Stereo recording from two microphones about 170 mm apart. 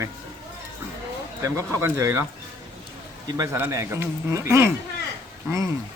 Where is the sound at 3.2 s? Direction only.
20° right (ahead or behind).